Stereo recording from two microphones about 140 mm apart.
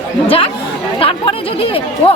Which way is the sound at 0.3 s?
45° left (ahead or behind).